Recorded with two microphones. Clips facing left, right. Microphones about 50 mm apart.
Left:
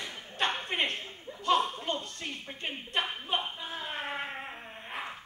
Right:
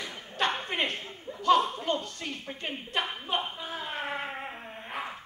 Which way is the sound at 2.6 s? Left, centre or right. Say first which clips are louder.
Even; centre.